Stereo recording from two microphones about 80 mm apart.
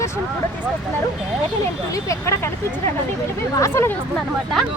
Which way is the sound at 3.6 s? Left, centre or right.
Left.